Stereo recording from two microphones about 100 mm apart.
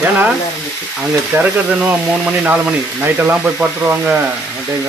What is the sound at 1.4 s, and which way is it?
Frying, 10° right (ahead or behind).